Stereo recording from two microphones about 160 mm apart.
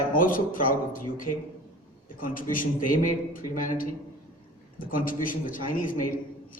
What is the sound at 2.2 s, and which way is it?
A man's voice, 60° left (ahead or behind).